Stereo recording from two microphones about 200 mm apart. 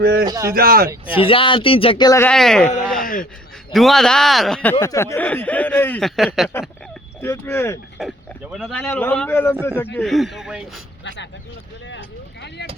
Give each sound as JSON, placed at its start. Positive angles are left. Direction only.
{"t": 0.0, "sound": "speech", "side_deg": -50}
{"t": 0.3, "sound": "speech", "side_deg": -15}
{"t": 0.5, "sound": "speech", "side_deg": -45}
{"t": 1.1, "sound": "speech", "side_deg": 25}
{"t": 2.3, "sound": "speech", "side_deg": 5}
{"t": 3.7, "sound": "speech", "side_deg": 0}
{"t": 7.2, "sound": "a man's voice", "side_deg": 10}
{"t": 8.0, "sound": "a man's voice", "side_deg": 0}